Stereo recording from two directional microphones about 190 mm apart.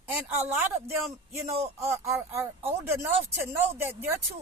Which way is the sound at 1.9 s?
15° right (ahead or behind).